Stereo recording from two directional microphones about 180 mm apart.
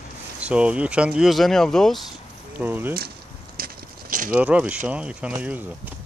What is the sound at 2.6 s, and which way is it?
Speech, 10° right (ahead or behind).